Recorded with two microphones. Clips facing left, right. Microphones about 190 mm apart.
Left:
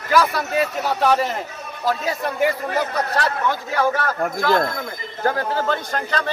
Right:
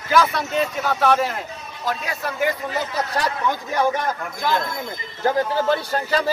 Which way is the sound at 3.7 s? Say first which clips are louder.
Even; 20° right (ahead or behind).